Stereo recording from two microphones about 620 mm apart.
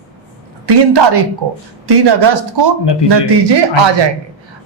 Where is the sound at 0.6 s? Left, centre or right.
Right.